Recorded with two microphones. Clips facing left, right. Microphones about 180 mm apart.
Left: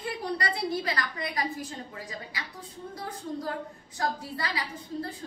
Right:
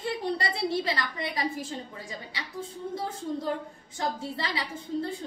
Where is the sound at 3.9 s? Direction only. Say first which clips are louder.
Even; 25° right (ahead or behind).